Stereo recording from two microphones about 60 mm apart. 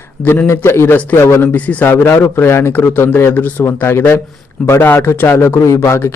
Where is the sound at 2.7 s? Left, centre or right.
Left.